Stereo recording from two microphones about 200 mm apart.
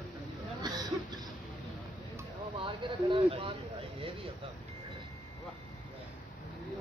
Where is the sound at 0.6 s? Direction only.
20° right (ahead or behind).